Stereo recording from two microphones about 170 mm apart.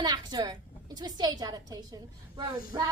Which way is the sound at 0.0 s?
25° right (ahead or behind).